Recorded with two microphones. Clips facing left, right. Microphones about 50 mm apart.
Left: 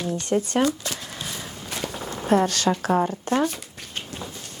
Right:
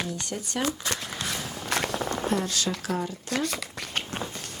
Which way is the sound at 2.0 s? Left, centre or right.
Right.